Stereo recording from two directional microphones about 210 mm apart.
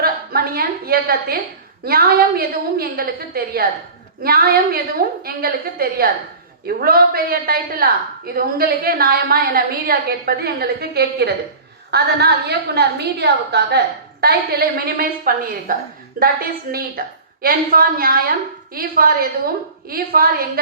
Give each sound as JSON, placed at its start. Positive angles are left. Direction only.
{"t": 0.0, "sound": "a woman's voice", "side_deg": -45}